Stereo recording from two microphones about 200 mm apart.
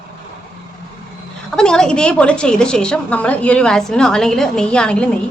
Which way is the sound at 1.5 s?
5° left (ahead or behind).